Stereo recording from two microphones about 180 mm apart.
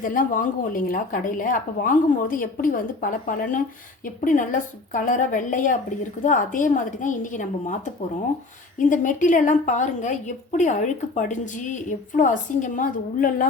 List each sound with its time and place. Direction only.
0.0 s a woman's voice: 50° left (ahead or behind)